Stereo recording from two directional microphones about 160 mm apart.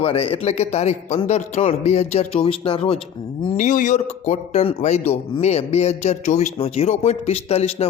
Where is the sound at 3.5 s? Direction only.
55° left (ahead or behind).